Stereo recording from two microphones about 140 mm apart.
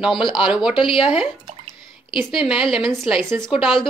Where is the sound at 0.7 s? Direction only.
35° left (ahead or behind).